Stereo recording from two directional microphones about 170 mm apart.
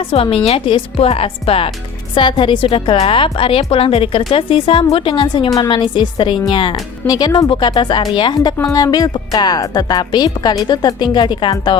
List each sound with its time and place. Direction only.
0.1 s a woman's voice: 35° left (ahead or behind)